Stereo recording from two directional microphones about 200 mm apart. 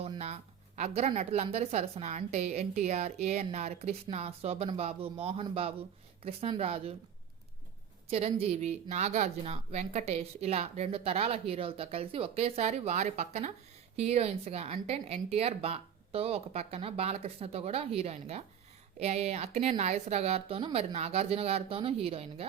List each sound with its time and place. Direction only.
0.0 s a sound: 30° right (ahead or behind)
0.8 s speech: 35° right (ahead or behind)
8.0 s speech: 30° right (ahead or behind)